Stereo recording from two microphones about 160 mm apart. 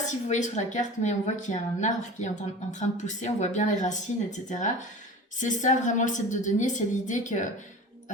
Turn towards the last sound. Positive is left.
turn(degrees=50)  # may be behind; listen again after turning